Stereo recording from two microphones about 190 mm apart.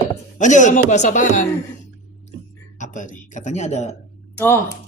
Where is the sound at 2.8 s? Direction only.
40° left (ahead or behind).